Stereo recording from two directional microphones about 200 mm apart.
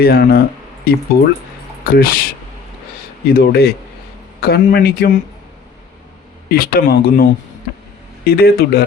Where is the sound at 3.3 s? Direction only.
45° left (ahead or behind).